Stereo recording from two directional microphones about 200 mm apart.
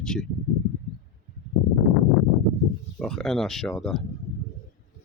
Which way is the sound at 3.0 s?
Centre (ahead or behind).